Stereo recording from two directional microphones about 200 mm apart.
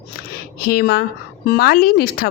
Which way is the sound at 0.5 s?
50° left (ahead or behind).